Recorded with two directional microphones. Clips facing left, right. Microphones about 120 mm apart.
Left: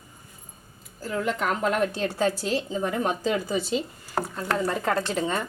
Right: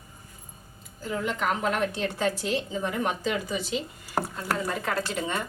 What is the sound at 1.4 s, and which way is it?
A woman's voice, 40° left (ahead or behind).